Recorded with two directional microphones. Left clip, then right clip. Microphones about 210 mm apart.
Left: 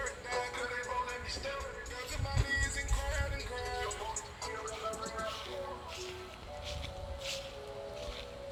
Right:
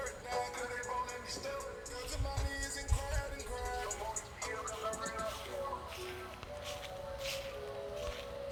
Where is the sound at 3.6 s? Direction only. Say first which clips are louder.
Left 2 dB; 60° right (ahead or behind).